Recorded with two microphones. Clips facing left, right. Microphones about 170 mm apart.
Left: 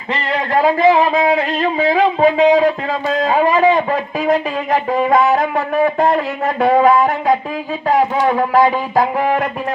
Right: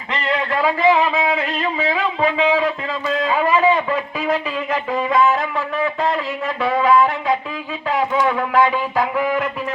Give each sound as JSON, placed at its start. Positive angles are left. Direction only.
{"t": 0.1, "sound": "a man's voice", "side_deg": 35}